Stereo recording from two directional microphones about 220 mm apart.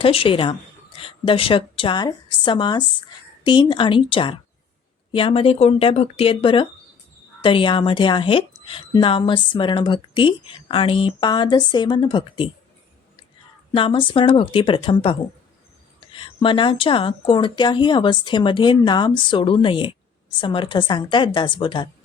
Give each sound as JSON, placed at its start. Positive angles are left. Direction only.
{"t": 0.0, "sound": "a woman's voice", "side_deg": 25}
{"t": 13.7, "sound": "a woman's voice", "side_deg": 25}